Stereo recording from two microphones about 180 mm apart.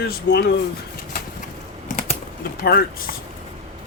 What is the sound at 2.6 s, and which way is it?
Speech, 55° left (ahead or behind).